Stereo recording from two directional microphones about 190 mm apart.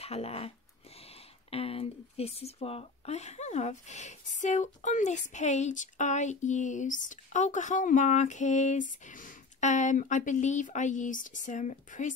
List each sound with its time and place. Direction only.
0.0 s speech: 30° left (ahead or behind)
1.5 s speech: 30° left (ahead or behind)